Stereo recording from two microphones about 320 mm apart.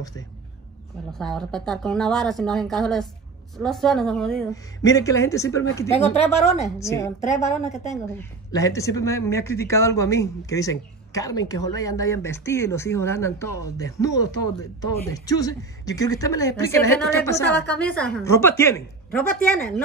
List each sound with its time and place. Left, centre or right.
1.1 s a woman's voice: centre
6.8 s speech: centre
7.4 s a woman's voice: left
7.9 s speech: centre